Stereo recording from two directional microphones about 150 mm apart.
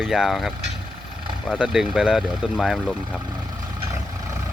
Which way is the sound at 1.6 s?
5° right (ahead or behind).